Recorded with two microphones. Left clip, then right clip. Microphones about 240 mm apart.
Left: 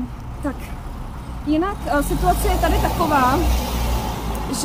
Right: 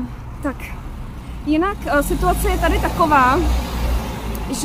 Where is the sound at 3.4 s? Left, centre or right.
Left.